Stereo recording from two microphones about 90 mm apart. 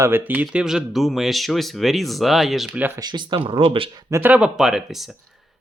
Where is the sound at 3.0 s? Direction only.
60° right (ahead or behind); by 3.9 s 85° right.